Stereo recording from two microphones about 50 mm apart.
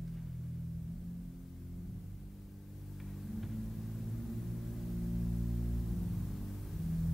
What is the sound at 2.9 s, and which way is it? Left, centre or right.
Vehicle, centre.